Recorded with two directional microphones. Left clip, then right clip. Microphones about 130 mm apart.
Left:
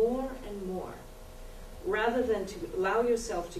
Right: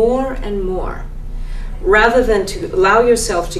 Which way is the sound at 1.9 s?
35° right (ahead or behind).